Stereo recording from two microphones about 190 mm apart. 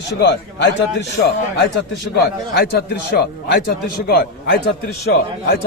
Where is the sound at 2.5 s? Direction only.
55° left (ahead or behind).